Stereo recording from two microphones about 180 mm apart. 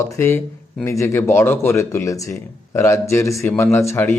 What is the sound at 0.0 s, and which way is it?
Speech, 15° left (ahead or behind).